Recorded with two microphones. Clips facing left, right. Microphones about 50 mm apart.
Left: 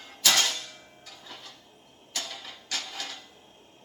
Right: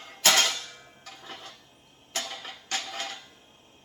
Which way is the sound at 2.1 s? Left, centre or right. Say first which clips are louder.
Right 2 dB; right.